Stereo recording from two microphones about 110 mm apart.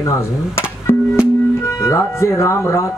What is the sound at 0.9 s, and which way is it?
Music, 20° left (ahead or behind).